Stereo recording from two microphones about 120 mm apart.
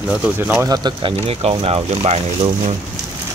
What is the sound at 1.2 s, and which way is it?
Speech, 55° right (ahead or behind).